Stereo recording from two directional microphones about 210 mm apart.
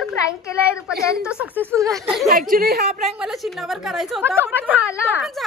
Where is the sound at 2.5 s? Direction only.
45° right (ahead or behind).